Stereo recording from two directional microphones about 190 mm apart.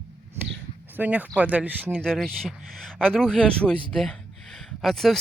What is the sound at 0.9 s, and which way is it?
Speech, 10° right (ahead or behind).